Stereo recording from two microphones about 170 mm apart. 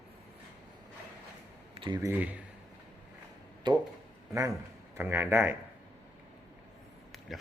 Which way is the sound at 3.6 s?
25° right (ahead or behind).